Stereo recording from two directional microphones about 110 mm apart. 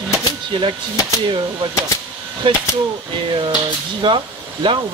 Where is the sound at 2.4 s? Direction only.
50° right (ahead or behind).